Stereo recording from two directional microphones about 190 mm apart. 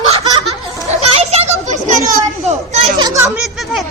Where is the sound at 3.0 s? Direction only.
15° right (ahead or behind).